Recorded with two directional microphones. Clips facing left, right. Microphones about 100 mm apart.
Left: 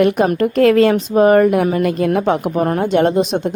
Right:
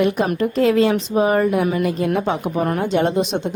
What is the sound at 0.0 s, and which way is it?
A woman's voice, 60° left (ahead or behind).